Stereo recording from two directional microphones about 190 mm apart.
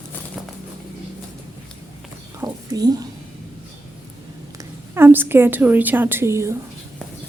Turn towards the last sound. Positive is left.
turn(degrees=-15)  # may be behind; listen again after turning